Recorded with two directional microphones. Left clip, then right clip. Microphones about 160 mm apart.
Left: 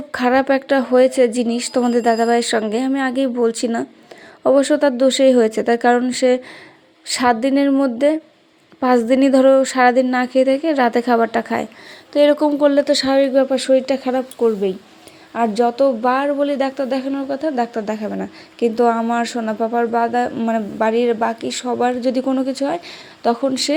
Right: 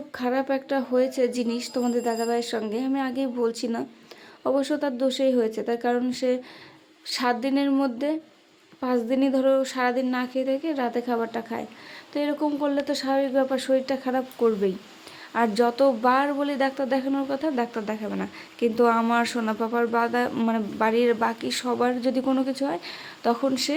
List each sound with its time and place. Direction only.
0.1 s a woman's voice: 35° left (ahead or behind)
13.4 s a woman's voice: 20° left (ahead or behind)
14.3 s speech: 5° left (ahead or behind)